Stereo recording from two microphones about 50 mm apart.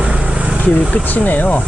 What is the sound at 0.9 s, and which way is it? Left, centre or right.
Speech, left.